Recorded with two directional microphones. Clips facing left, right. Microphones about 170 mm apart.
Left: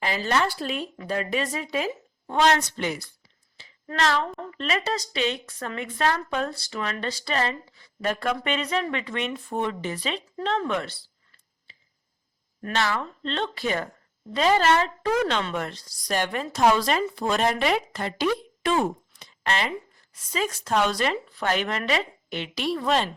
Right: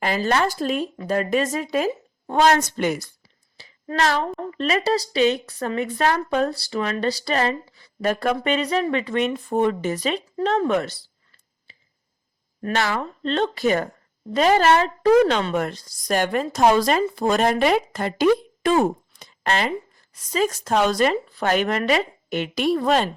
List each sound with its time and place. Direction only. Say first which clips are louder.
0.0 s a woman's voice: right 4 dB; 45° right (ahead or behind)
12.6 s a woman's voice: right 3 dB; 40° right (ahead or behind)